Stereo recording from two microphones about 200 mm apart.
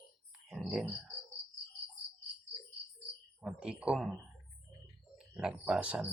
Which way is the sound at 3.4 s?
5° right (ahead or behind).